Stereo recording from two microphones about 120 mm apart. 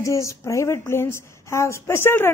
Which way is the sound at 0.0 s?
25° left (ahead or behind).